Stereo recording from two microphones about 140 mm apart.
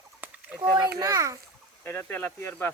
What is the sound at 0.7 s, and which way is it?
Speech, 25° right (ahead or behind).